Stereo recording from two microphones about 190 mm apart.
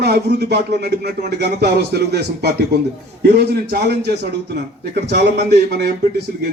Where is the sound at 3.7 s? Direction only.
55° right (ahead or behind).